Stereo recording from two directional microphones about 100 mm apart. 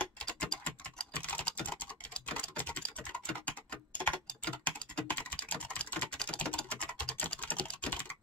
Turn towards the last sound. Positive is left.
turn(degrees=15)  # may be behind; listen again after turning